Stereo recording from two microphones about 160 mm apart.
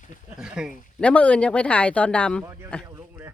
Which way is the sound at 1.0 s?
10° left (ahead or behind).